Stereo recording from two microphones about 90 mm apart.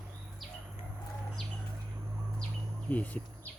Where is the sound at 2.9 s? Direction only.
15° left (ahead or behind).